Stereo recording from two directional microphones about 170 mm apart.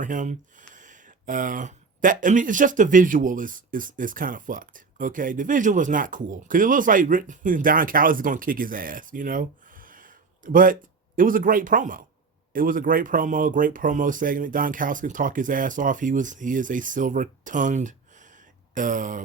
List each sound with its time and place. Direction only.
0.0 s speech: 50° right (ahead or behind)